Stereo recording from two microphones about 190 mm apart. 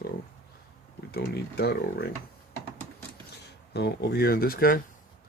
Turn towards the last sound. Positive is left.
turn(degrees=50)  # may be behind; listen again after turning